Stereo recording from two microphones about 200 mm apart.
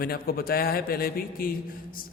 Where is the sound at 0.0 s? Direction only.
50° left (ahead or behind).